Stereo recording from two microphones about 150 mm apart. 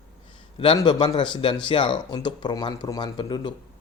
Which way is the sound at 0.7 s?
25° left (ahead or behind).